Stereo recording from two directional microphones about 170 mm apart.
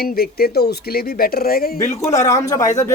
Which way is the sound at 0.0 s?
65° left (ahead or behind).